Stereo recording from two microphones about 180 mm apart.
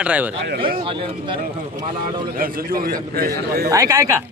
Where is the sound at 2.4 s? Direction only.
55° right (ahead or behind).